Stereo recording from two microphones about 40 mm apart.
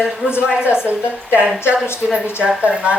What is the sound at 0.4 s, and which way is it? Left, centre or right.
Speech, right.